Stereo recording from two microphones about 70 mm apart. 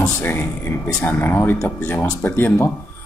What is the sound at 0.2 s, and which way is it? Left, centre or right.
Speech, left.